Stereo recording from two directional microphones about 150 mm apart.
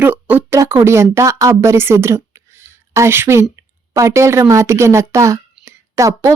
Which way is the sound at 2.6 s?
15° right (ahead or behind).